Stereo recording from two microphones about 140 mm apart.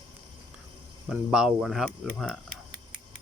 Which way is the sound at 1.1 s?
5° right (ahead or behind).